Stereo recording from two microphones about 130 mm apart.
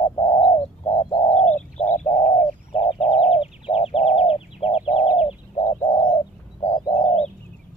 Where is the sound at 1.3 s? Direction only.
65° left (ahead or behind).